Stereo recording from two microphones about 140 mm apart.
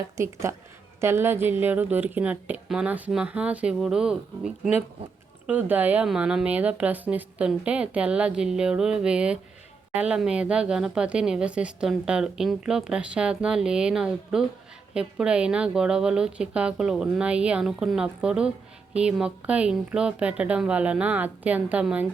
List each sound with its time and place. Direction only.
0.2 s speech: 20° right (ahead or behind)